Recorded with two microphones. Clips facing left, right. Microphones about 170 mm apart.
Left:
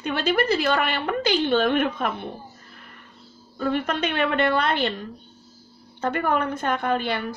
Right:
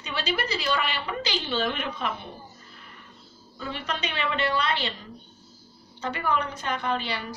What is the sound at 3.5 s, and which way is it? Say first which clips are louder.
A woman's voice: left 9 dB; 50° left (ahead or behind).